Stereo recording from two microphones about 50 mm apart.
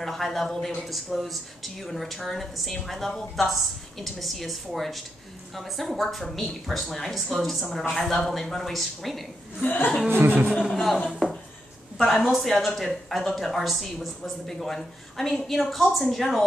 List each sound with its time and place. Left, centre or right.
0.0 s speech: centre
9.6 s speech: left
10.0 s a sound: right
10.7 s speech: centre
12.0 s speech: centre